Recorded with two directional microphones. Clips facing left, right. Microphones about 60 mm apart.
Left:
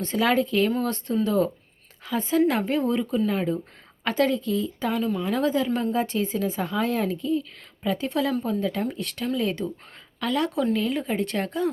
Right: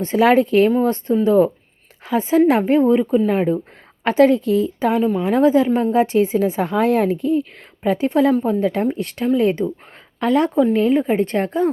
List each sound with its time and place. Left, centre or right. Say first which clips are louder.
0.1 s a woman's voice: right 9 dB; right
0.7 s a woman's voice: right 8 dB; right
4.9 s a woman's voice: right 8 dB; right
6.6 s a woman's voice: right 8 dB; right
10.6 s a woman's voice: right 9 dB; right